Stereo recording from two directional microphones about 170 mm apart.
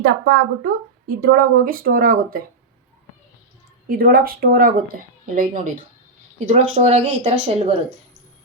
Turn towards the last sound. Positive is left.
turn(degrees=-40)  # may be behind; listen again after turning